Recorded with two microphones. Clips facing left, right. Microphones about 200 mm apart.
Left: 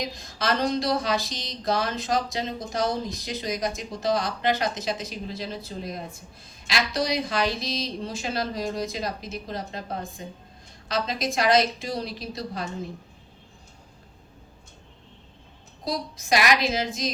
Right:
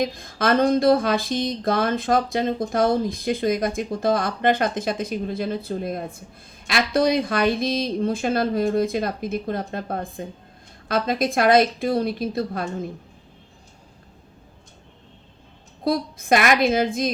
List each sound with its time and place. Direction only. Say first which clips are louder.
0.0 s speech: right 7 dB; 55° right (ahead or behind)
15.8 s speech: right 7 dB; 55° right (ahead or behind)